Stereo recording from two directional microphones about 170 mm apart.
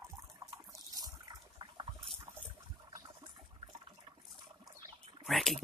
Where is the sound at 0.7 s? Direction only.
20° right (ahead or behind).